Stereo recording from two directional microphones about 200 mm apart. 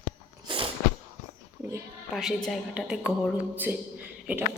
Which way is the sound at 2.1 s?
Centre (ahead or behind).